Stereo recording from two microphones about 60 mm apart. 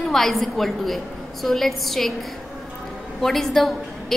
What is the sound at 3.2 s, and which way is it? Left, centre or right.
Speech, centre.